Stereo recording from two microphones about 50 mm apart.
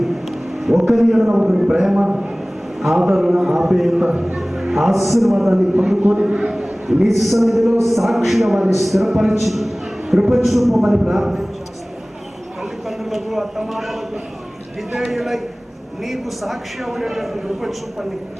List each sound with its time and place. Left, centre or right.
0.0 s a sound: centre
1.4 s a man's voice: centre
2.8 s a man's voice: centre
6.1 s a man's voice: centre
12.9 s a man's voice: centre